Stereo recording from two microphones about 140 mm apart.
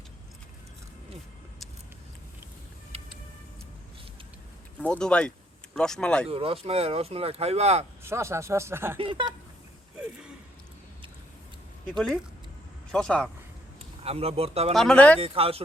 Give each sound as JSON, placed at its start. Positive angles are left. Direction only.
{"t": 2.9, "sound": "a sound", "side_deg": -45}
{"t": 4.8, "sound": "speech", "side_deg": 5}
{"t": 6.2, "sound": "speech", "side_deg": -40}
{"t": 8.0, "sound": "speech", "side_deg": -20}
{"t": 9.0, "sound": "speech", "side_deg": -35}
{"t": 11.9, "sound": "speech", "side_deg": 5}
{"t": 14.0, "sound": "speech", "side_deg": -45}
{"t": 14.7, "sound": "speech", "side_deg": 5}
{"t": 15.2, "sound": "speech", "side_deg": -40}